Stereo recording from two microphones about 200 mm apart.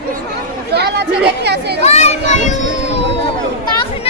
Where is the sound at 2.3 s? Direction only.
35° left (ahead or behind).